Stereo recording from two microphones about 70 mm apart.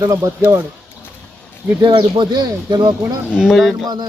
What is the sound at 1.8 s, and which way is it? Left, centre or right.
Speech, right.